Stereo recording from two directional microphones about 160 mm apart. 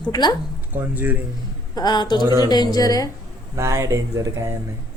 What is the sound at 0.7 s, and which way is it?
Speech, 10° right (ahead or behind).